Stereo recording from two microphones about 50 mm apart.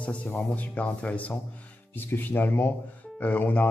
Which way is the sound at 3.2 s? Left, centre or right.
Left.